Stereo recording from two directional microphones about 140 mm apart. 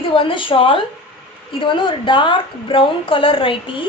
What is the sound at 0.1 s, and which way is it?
A woman's voice, 40° left (ahead or behind).